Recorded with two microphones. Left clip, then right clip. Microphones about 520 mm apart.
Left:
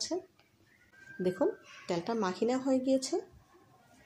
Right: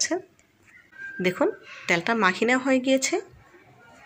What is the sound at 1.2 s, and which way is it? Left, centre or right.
Speech, right.